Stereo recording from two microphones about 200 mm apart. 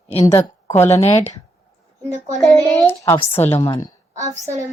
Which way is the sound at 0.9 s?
35° left (ahead or behind).